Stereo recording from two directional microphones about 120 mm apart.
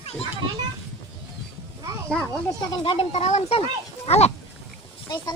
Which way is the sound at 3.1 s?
65° left (ahead or behind).